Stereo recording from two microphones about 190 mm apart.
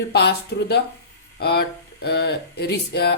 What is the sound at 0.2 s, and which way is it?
Speech, 60° left (ahead or behind).